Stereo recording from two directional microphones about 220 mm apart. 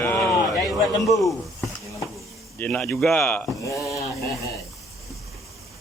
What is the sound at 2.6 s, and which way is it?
Speech, 5° left (ahead or behind).